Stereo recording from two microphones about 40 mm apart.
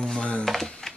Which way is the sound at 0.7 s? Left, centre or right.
Centre.